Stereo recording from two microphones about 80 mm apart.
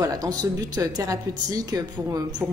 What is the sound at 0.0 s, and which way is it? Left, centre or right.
A woman's voice, right.